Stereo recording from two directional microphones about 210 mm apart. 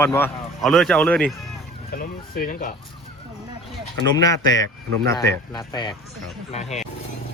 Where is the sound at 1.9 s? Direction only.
45° left (ahead or behind).